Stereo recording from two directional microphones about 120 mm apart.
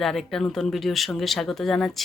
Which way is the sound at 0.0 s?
Centre (ahead or behind).